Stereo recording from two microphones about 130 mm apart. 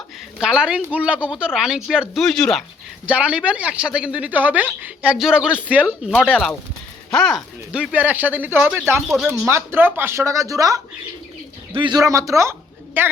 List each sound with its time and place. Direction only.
0.3 s speech: 5° right (ahead or behind)
3.1 s speech: 10° right (ahead or behind)
9.0 s speech: centre (ahead or behind)
9.5 s speech: 20° right (ahead or behind)
11.8 s speech: 30° right (ahead or behind)